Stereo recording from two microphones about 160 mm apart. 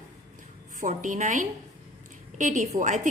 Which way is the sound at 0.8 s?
50° right (ahead or behind).